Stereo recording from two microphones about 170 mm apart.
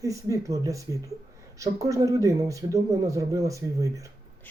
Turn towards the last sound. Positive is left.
turn(degrees=-20)  # may be behind; listen again after turning